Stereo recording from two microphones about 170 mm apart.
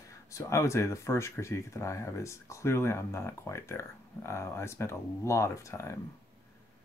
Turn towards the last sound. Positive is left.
turn(degrees=15)  # may be behind; listen again after turning